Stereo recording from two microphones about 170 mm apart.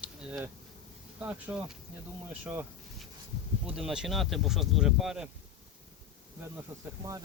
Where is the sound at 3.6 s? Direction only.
5° right (ahead or behind).